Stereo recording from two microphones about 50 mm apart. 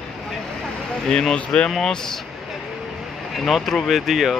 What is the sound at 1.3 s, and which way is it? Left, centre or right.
Speech, left.